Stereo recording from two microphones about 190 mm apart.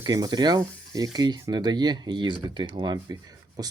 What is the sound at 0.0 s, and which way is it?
Speech, 20° right (ahead or behind).